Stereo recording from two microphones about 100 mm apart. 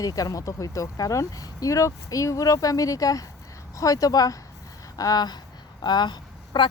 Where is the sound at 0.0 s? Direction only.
35° left (ahead or behind).